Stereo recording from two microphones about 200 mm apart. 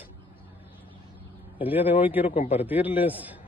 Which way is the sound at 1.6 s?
10° right (ahead or behind).